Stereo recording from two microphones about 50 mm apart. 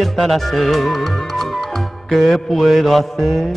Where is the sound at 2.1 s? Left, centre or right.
Centre.